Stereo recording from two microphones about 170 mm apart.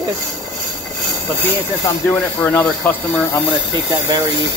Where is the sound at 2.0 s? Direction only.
10° left (ahead or behind).